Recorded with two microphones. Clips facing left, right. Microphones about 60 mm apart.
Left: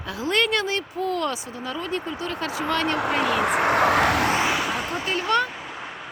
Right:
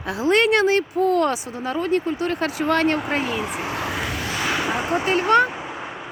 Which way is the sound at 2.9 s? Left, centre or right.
Left.